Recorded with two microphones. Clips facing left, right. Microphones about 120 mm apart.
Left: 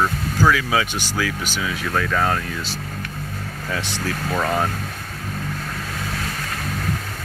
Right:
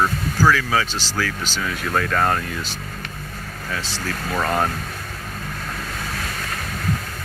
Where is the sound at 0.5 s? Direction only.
15° left (ahead or behind); by 2.5 s centre (ahead or behind).